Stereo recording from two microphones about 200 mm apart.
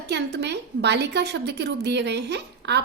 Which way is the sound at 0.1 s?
60° right (ahead or behind).